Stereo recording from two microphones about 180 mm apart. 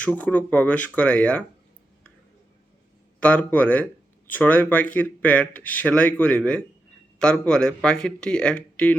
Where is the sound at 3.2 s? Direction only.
10° left (ahead or behind).